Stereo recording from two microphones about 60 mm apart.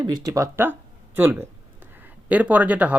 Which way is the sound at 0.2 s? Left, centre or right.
Right.